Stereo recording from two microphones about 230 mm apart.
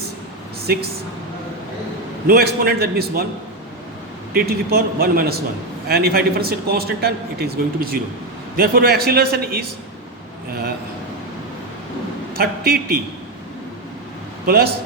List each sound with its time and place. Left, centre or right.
0.6 s speech: right
2.2 s a man's voice: right
4.4 s a man's voice: right
12.3 s a man's voice: right
14.4 s speech: right